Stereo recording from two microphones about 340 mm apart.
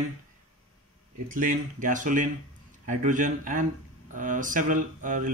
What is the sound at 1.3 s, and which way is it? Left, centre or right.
Speech, right.